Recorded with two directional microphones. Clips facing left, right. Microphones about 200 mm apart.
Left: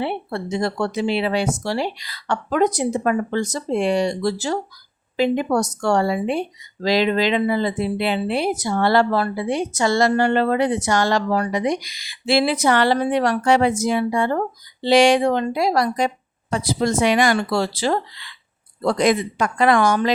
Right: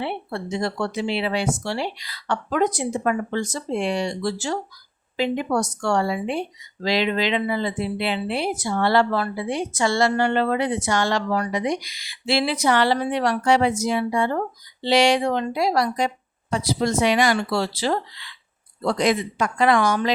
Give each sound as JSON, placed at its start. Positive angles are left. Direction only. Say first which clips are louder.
{"t": 0.0, "sound": "a woman's voice", "louder": "left 3 dB", "side_deg": 40}